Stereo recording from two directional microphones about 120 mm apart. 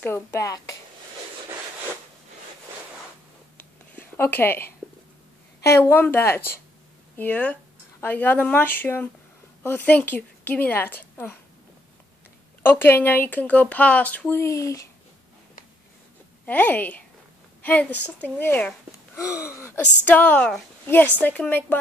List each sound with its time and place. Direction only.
0.0 s speech: 20° left (ahead or behind)
3.5 s a sound: 15° left (ahead or behind)
5.6 s speech: 20° left (ahead or behind)
12.6 s speech: 20° left (ahead or behind)
14.4 s speech: 25° left (ahead or behind)
16.4 s speech: 15° left (ahead or behind)